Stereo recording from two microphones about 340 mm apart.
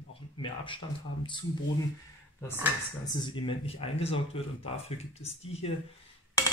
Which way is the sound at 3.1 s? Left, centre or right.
Centre.